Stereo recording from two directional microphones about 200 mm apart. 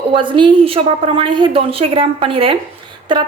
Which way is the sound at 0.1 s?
25° right (ahead or behind).